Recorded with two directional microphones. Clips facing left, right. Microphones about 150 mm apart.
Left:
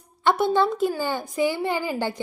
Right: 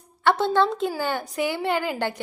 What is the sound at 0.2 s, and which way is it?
A woman's voice, 15° left (ahead or behind).